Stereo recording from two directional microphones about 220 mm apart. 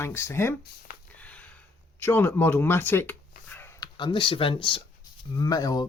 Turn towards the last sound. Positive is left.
turn(degrees=15)  # may be behind; listen again after turning